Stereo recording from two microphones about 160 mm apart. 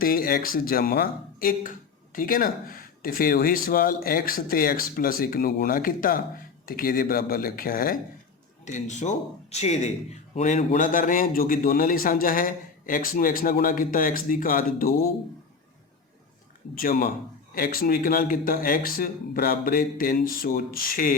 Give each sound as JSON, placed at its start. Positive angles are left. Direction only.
{"t": 0.0, "sound": "a man's voice", "side_deg": 65}
{"t": 8.6, "sound": "a man's voice", "side_deg": 50}
{"t": 16.7, "sound": "a man's voice", "side_deg": 65}